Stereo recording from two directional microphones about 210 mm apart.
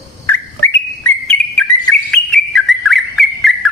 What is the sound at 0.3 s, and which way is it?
Bird, 5° left (ahead or behind).